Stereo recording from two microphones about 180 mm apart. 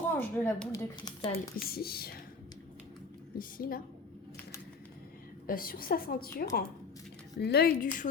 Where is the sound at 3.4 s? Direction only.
50° left (ahead or behind).